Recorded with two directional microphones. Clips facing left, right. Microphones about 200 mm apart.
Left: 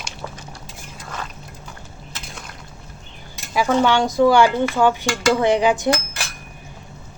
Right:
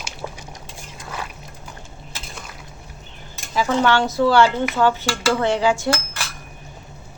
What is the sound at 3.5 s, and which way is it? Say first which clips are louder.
Dishes: left 1 dB; 15° left (ahead or behind).